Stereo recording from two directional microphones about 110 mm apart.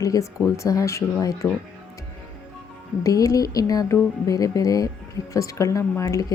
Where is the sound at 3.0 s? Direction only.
35° left (ahead or behind).